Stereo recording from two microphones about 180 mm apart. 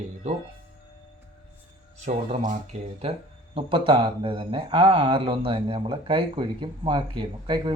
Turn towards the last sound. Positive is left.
turn(degrees=-25)  # may be behind; listen again after turning